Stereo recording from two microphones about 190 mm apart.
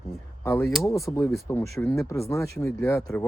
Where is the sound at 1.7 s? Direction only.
Centre (ahead or behind).